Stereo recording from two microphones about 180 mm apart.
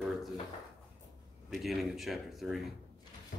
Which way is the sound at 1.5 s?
Centre (ahead or behind).